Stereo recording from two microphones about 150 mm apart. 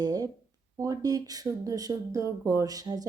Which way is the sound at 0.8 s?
25° right (ahead or behind).